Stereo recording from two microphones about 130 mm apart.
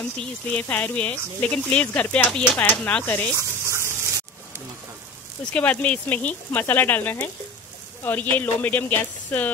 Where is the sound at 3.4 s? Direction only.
20° right (ahead or behind).